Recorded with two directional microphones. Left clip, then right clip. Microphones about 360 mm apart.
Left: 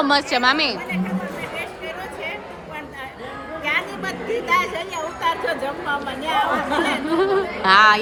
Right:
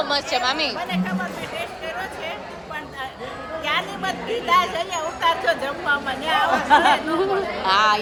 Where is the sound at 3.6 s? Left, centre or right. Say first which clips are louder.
Left 1 dB; centre.